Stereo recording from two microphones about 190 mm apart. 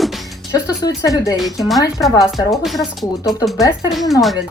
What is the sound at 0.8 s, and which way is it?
Speech, 20° left (ahead or behind).